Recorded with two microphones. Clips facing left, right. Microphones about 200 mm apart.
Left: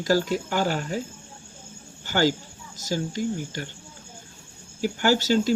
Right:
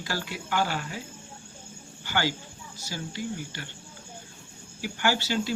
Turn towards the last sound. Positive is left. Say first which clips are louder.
# left 6 dB
turn(degrees=40)  # may be behind; listen again after turning